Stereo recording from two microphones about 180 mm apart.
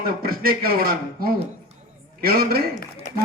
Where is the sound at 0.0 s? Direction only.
55° right (ahead or behind).